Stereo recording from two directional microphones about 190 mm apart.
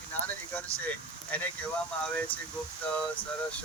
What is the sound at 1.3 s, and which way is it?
Speech, 10° left (ahead or behind).